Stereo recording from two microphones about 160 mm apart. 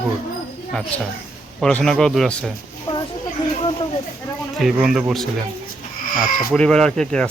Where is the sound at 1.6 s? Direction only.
5° left (ahead or behind).